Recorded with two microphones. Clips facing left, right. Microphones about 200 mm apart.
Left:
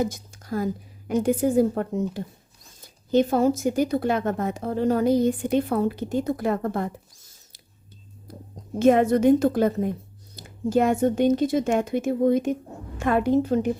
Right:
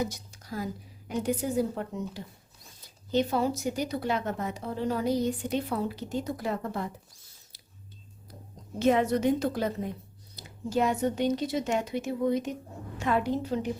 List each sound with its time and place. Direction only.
0.0 s a woman's voice: 50° left (ahead or behind)
8.3 s whispering: 50° left (ahead or behind)
8.8 s a woman's voice: 50° left (ahead or behind)